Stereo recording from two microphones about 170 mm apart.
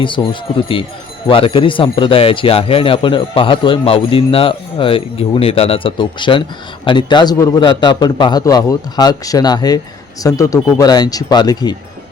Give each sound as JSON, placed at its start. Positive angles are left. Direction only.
{"t": 0.0, "sound": "a man's voice", "side_deg": 30}